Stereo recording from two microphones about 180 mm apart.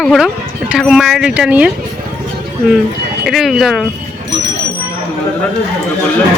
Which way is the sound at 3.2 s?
Centre (ahead or behind).